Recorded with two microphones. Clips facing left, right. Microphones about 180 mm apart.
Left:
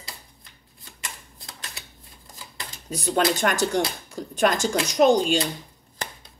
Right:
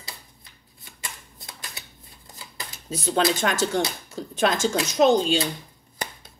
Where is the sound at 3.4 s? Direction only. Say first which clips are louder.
Left 1 dB; 15° left (ahead or behind).